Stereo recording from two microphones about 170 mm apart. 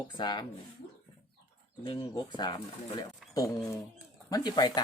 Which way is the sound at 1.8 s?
25° left (ahead or behind).